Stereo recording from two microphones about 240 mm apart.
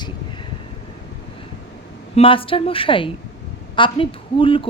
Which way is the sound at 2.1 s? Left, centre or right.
Left.